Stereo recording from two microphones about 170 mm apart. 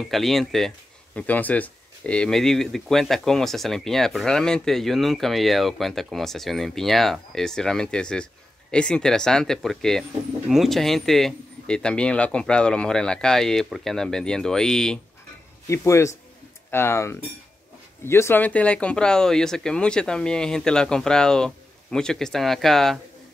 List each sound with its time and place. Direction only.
0.0 s speech: centre (ahead or behind)
15.6 s speech: 15° left (ahead or behind)